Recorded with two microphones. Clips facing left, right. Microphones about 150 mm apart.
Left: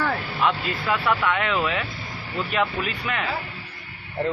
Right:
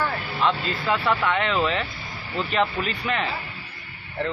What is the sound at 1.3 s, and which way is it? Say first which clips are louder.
Speech: right 1 dB; 5° left (ahead or behind).